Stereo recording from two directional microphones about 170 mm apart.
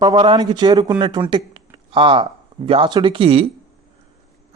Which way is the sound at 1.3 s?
30° right (ahead or behind).